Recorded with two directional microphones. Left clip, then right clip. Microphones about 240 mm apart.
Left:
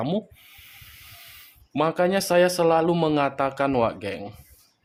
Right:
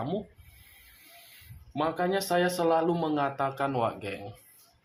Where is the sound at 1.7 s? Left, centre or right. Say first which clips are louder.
Left 6 dB; left.